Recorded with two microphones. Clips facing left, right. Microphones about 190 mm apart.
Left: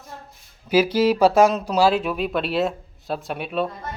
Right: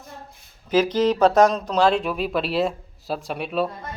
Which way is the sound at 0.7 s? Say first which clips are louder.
Left 1 dB; 10° left (ahead or behind).